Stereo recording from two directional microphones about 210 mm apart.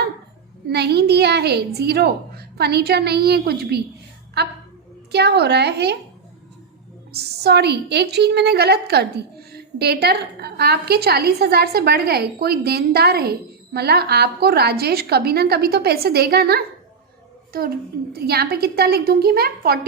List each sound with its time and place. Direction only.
0.7 s a woman's voice: 50° right (ahead or behind)
5.1 s a woman's voice: 50° right (ahead or behind)
7.1 s a woman's voice: 50° right (ahead or behind)
18.1 s a woman's voice: 50° right (ahead or behind)